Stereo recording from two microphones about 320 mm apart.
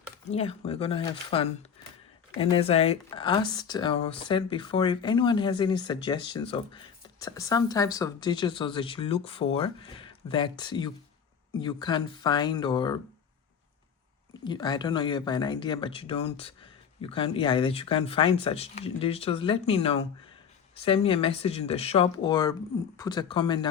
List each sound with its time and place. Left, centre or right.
0.3 s speech: centre
14.4 s speech: centre